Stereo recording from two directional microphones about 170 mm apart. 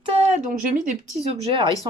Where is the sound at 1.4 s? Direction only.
30° right (ahead or behind).